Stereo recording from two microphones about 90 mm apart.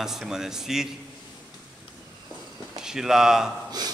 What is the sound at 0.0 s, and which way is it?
Speech, 5° right (ahead or behind).